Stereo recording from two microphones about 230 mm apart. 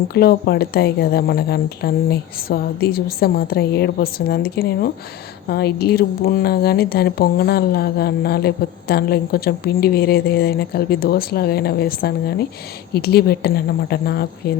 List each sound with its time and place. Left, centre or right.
0.1 s speech: left